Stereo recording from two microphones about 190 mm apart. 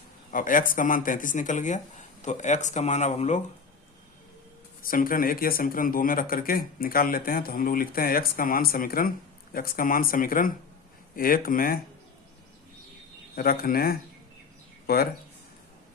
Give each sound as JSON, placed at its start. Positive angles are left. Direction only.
{"t": 0.3, "sound": "speech", "side_deg": 45}
{"t": 4.8, "sound": "speech", "side_deg": 50}
{"t": 13.3, "sound": "speech", "side_deg": 50}